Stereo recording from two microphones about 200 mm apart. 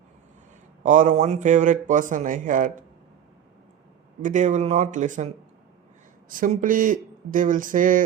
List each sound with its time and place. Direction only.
0.8 s a man's voice: 40° right (ahead or behind)
4.2 s a man's voice: 40° right (ahead or behind)